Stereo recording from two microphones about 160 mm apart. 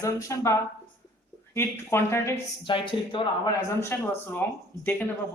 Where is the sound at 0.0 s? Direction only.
20° left (ahead or behind).